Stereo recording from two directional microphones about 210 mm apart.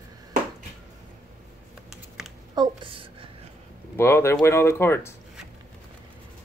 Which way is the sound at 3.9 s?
10° left (ahead or behind).